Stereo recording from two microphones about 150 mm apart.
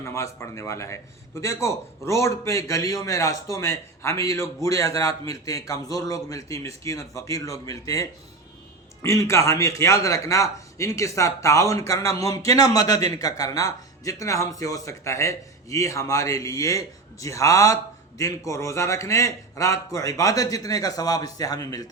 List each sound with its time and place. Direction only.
0.0 s a man's voice: 20° left (ahead or behind)